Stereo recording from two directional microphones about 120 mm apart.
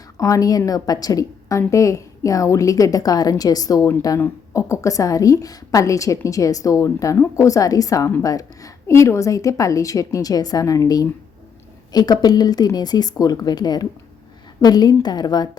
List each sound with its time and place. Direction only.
0.2 s a woman's voice: 30° left (ahead or behind)